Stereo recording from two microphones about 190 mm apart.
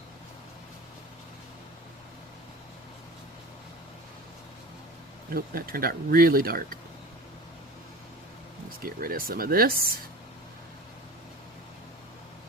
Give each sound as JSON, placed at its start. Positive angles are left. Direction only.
{"t": 5.3, "sound": "speech", "side_deg": -50}
{"t": 8.8, "sound": "speech", "side_deg": -50}